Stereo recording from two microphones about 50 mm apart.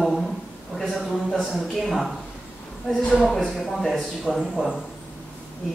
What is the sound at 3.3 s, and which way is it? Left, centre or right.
Speech, centre.